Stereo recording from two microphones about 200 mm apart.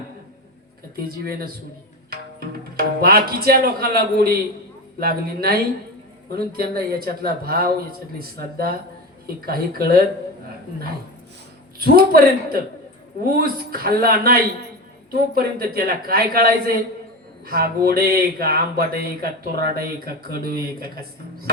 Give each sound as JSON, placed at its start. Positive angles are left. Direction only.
{"t": 0.9, "sound": "speech", "side_deg": -50}
{"t": 11.8, "sound": "speech", "side_deg": -50}